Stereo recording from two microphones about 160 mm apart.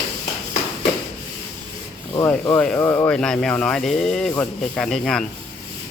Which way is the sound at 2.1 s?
25° left (ahead or behind).